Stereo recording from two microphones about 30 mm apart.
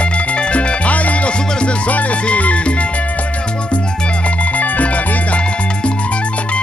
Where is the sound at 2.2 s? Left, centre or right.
Left.